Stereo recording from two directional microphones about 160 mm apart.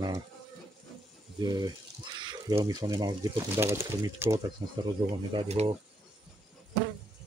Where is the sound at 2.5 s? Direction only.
25° right (ahead or behind).